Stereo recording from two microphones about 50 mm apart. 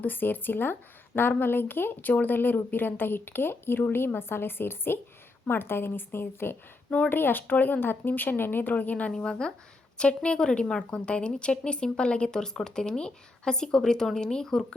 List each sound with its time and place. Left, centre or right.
0.0 s speech: left
8.7 s speech: left
9.1 s a woman's voice: centre